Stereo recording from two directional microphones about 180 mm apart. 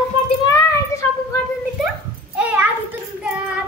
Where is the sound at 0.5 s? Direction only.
15° left (ahead or behind).